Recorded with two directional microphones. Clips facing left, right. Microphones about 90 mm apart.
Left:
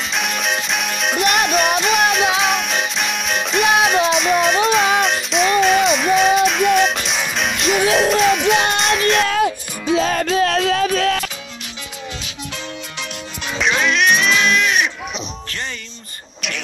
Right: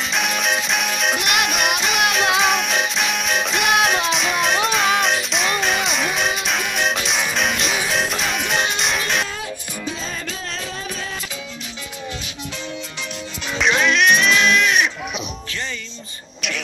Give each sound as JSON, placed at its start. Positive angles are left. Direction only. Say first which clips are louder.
{"t": 0.0, "sound": "music", "louder": "even", "side_deg": 0}
{"t": 9.2, "sound": "music", "louder": "left 10 dB", "side_deg": 65}
{"t": 13.6, "sound": "a sound", "louder": "even", "side_deg": 0}